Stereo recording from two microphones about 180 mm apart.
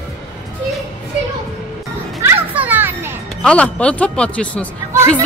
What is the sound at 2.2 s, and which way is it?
Children playing, 10° right (ahead or behind).